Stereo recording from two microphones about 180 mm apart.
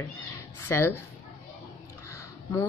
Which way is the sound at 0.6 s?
15° left (ahead or behind).